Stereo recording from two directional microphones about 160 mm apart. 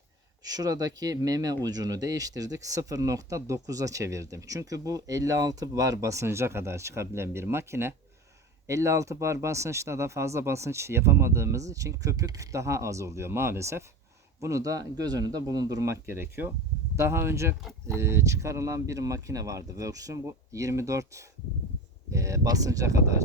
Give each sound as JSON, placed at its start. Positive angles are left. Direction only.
{"t": 0.4, "sound": "speech", "side_deg": -25}